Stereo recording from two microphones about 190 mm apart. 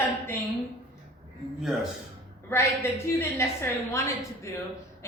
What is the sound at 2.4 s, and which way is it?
A woman's voice, 15° left (ahead or behind).